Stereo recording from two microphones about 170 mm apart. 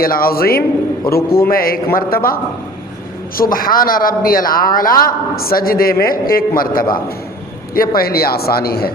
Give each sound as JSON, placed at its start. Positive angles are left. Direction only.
{"t": 0.0, "sound": "a man's voice", "side_deg": 60}